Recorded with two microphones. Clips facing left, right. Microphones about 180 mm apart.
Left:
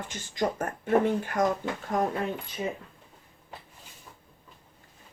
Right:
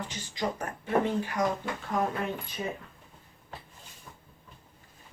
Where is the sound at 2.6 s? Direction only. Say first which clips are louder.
Left 3 dB; 15° left (ahead or behind).